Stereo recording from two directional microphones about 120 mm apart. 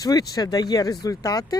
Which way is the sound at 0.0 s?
35° left (ahead or behind).